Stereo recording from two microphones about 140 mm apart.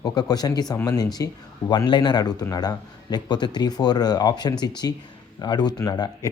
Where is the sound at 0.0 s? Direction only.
30° left (ahead or behind).